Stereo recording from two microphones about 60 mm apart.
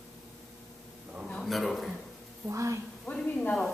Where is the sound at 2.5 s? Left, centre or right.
Right.